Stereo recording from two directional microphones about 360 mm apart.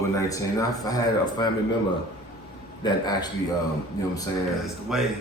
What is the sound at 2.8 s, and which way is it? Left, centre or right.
Speech, centre.